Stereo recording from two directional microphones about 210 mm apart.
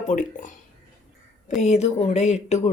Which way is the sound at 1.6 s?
30° left (ahead or behind).